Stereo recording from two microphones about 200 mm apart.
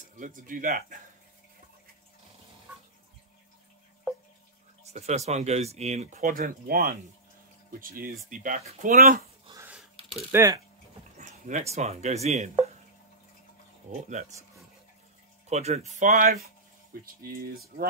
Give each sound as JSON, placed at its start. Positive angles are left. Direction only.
{"t": 0.2, "sound": "speech", "side_deg": -40}
{"t": 4.8, "sound": "speech", "side_deg": -35}
{"t": 8.9, "sound": "speech", "side_deg": -50}
{"t": 9.5, "sound": "a sound", "side_deg": -15}
{"t": 10.3, "sound": "speech", "side_deg": -15}
{"t": 11.1, "sound": "a sound", "side_deg": -40}
{"t": 11.7, "sound": "speech", "side_deg": -35}
{"t": 14.0, "sound": "speech", "side_deg": -35}
{"t": 15.4, "sound": "speech", "side_deg": -30}